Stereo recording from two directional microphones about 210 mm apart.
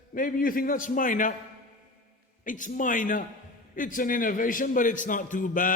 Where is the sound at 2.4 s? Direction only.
40° left (ahead or behind).